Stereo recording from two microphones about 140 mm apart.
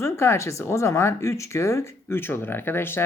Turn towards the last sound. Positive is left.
turn(degrees=15)  # may be behind; listen again after turning